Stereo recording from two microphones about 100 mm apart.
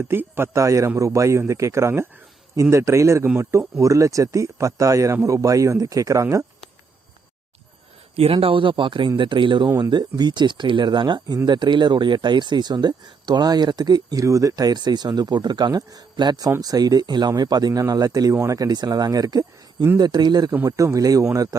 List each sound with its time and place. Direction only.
0.1 s a man's voice: 25° right (ahead or behind)
8.1 s speech: 75° right (ahead or behind); by 20.5 s 45° right (ahead or behind)
20.7 s speech: 35° right (ahead or behind)